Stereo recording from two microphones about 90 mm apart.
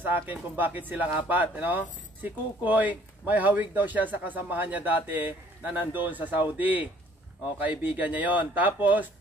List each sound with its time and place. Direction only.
0.0 s speech: 20° right (ahead or behind)